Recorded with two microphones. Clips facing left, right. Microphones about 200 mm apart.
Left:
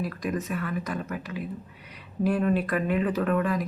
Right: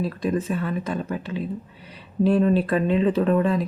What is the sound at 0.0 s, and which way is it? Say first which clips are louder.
Speech: right 5 dB; 30° right (ahead or behind).